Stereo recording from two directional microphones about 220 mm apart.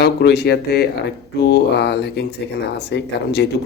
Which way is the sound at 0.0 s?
50° left (ahead or behind).